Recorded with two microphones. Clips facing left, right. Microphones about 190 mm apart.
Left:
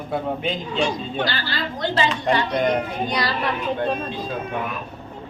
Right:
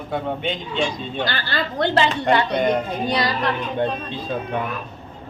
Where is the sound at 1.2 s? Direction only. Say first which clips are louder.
Right 1 dB; 60° right (ahead or behind).